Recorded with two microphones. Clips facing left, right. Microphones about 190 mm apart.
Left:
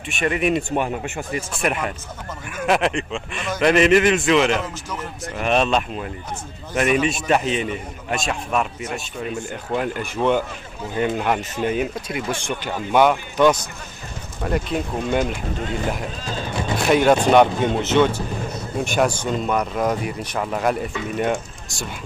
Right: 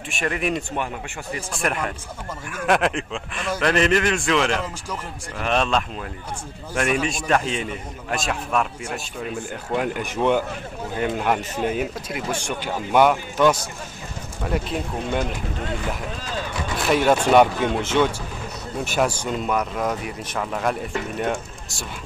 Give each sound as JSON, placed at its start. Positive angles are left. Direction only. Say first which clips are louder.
{"t": 0.1, "sound": "speech", "louder": "left 4 dB", "side_deg": 0}
{"t": 0.6, "sound": "speech", "louder": "left 5 dB", "side_deg": 15}
{"t": 1.5, "sound": "speech", "louder": "even", "side_deg": 5}
{"t": 10.0, "sound": "speech", "louder": "left 1 dB", "side_deg": -15}
{"t": 11.0, "sound": "speech", "louder": "left 2 dB", "side_deg": 0}
{"t": 16.7, "sound": "a sound", "louder": "left 3 dB", "side_deg": 0}
{"t": 17.3, "sound": "speech", "louder": "left 1 dB", "side_deg": -5}